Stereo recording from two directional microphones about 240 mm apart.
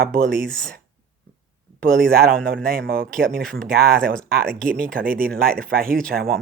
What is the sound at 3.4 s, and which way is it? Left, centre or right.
Speech, centre.